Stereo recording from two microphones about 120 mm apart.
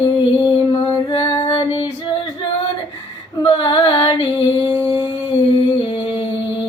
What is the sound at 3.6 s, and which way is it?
Music, 45° left (ahead or behind).